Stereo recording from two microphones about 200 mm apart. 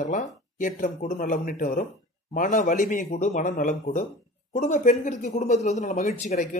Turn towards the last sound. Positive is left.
turn(degrees=40)  # may be behind; listen again after turning